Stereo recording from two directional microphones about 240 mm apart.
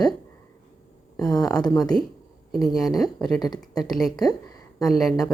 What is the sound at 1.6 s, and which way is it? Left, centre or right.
Speech, centre.